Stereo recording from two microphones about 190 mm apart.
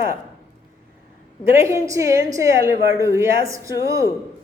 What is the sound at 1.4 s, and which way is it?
A woman's voice, 15° right (ahead or behind).